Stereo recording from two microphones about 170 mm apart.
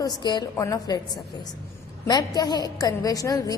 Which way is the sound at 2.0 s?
20° left (ahead or behind).